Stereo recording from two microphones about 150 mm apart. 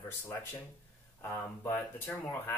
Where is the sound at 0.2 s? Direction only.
15° left (ahead or behind).